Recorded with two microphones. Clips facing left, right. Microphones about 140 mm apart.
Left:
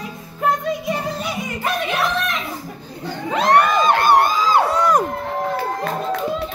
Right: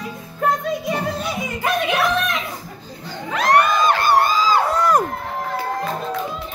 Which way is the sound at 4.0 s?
55° left (ahead or behind).